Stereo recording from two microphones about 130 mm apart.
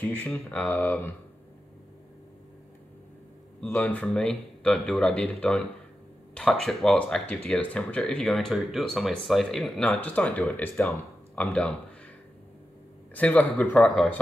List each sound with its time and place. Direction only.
0.0 s speech: 15° left (ahead or behind)
3.6 s speech: 15° left (ahead or behind)
13.1 s speech: 10° left (ahead or behind)